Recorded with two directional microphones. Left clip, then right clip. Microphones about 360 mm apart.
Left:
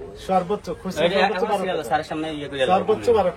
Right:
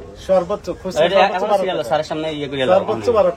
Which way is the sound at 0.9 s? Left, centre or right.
Centre.